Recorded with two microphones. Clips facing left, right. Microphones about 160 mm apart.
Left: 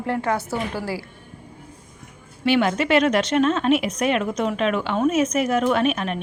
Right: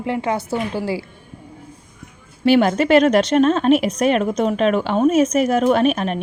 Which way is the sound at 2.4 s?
40° right (ahead or behind).